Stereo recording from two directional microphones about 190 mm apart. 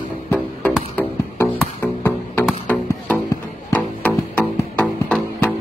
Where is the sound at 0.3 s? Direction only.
10° left (ahead or behind).